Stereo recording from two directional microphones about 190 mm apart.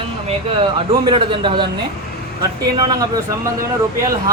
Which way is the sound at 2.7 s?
20° right (ahead or behind).